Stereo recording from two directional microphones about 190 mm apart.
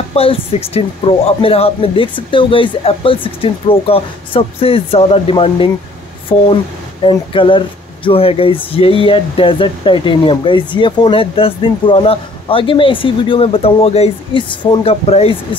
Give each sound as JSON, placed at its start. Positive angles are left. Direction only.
{"t": 0.1, "sound": "speech", "side_deg": 30}